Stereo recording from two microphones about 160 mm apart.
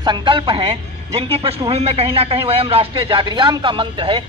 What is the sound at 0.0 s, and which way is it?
Speech, 30° right (ahead or behind).